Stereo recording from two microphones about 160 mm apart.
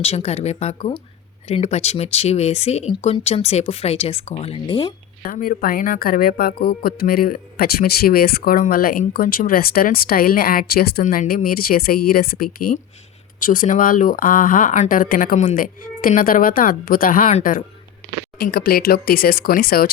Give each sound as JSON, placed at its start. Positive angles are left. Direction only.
{"t": 0.0, "sound": "speech", "side_deg": 40}
{"t": 5.2, "sound": "a woman's voice", "side_deg": 65}
{"t": 11.0, "sound": "a woman's voice", "side_deg": 60}
{"t": 13.4, "sound": "speech", "side_deg": 55}
{"t": 18.3, "sound": "a woman's voice", "side_deg": 70}